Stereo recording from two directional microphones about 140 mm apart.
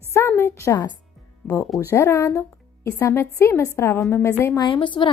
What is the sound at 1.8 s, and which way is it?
A woman's voice, 20° left (ahead or behind).